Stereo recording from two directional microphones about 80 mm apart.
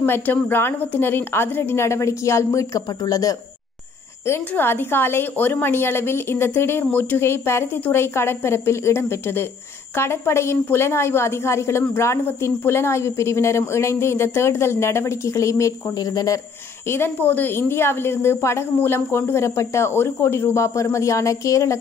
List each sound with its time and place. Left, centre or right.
0.0 s a woman's voice: left
4.3 s a woman's voice: left
16.0 s speech: left
16.9 s a woman's voice: left